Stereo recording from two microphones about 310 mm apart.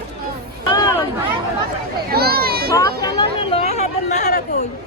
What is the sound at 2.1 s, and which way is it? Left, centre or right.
Speech, right.